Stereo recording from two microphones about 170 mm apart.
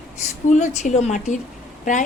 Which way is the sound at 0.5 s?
45° left (ahead or behind).